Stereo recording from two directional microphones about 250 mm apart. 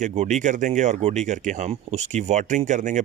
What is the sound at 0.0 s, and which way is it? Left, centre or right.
Speech, right.